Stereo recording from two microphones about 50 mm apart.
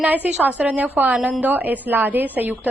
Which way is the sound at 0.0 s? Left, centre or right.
Right.